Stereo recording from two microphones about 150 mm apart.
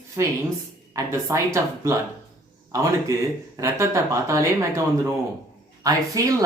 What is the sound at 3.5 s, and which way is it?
Speech, 20° right (ahead or behind).